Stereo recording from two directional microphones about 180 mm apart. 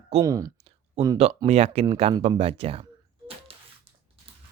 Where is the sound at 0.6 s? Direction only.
35° right (ahead or behind).